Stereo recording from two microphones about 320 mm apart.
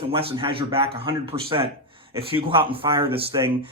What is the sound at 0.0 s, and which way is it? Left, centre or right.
Speech, centre.